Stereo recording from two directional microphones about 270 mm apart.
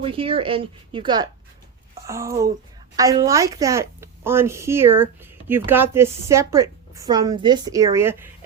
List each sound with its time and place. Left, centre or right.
0.0 s a woman's voice: centre